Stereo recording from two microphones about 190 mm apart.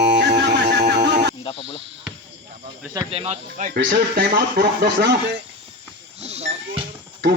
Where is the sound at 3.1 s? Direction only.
35° right (ahead or behind).